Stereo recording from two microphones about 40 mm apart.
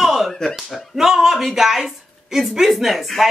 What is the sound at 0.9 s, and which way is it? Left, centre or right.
Speech, centre.